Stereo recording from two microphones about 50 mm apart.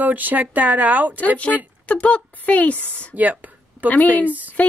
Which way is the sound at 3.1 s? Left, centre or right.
Right.